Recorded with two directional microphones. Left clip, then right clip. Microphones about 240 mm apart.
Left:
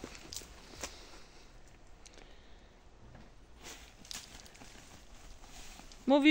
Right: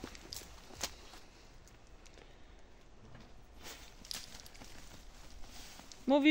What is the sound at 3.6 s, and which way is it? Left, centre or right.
Walk, centre.